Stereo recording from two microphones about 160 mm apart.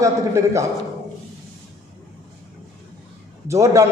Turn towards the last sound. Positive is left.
turn(degrees=-20)  # may be behind; listen again after turning